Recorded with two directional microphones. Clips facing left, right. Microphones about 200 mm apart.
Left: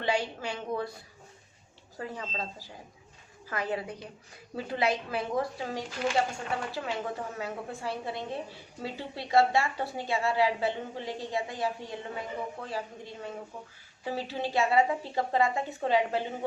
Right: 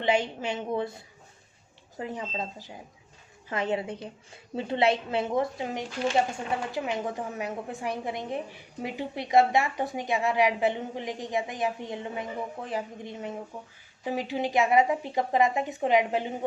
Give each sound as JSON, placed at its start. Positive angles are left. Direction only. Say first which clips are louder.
{"t": 0.0, "sound": "a woman's voice", "louder": "right 4 dB", "side_deg": -20}